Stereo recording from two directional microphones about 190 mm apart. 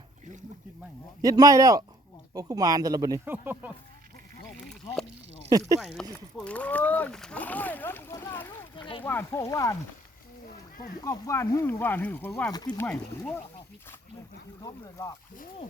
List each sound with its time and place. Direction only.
1.2 s speech: 20° right (ahead or behind)
5.5 s speech: 20° right (ahead or behind)
6.3 s speech: 5° left (ahead or behind)
8.7 s a sound: 25° left (ahead or behind)
9.0 s speech: 15° left (ahead or behind)
11.0 s speech: 15° left (ahead or behind)
12.5 s speech: 20° left (ahead or behind)
12.8 s speech: 10° left (ahead or behind)
14.6 s speech: 15° left (ahead or behind)